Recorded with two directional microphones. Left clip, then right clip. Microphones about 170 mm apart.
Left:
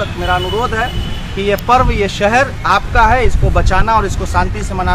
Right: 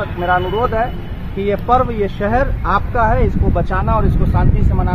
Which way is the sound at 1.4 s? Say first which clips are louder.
Left 3 dB; 40° right (ahead or behind).